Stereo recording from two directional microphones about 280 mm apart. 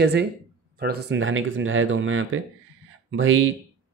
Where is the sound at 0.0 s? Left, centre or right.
Right.